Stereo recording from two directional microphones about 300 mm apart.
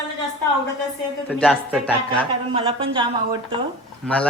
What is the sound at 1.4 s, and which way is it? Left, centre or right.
Speech, centre.